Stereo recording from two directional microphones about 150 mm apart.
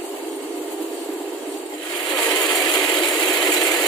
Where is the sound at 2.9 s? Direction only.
25° left (ahead or behind).